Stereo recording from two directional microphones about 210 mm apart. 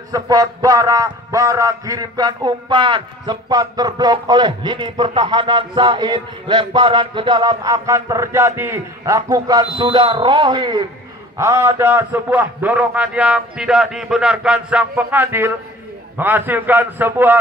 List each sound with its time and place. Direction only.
0.1 s a man's voice: 15° right (ahead or behind)